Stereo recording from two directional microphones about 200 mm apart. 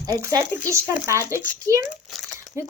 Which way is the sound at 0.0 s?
15° right (ahead or behind).